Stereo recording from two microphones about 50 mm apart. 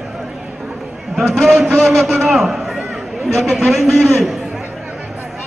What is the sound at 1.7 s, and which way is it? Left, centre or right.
Speech, centre.